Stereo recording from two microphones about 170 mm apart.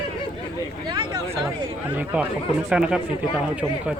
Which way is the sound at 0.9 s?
25° right (ahead or behind).